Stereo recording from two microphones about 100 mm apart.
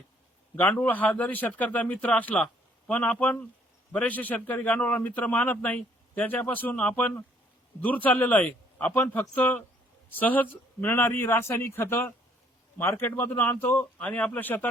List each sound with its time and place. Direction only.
0.5 s a man's voice: 20° left (ahead or behind)